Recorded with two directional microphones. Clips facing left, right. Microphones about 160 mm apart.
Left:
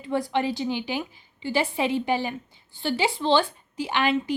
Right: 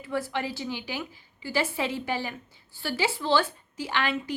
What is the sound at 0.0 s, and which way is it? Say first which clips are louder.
A woman's voice: left 5 dB; 20° left (ahead or behind).